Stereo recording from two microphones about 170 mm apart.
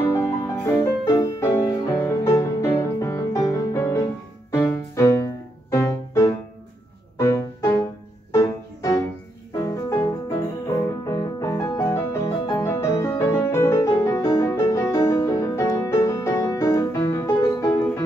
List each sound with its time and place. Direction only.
0.1 s music: 15° left (ahead or behind)